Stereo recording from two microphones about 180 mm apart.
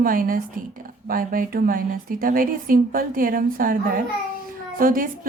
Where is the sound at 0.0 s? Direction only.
50° right (ahead or behind).